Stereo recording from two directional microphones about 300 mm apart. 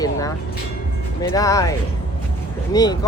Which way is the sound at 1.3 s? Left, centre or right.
Centre.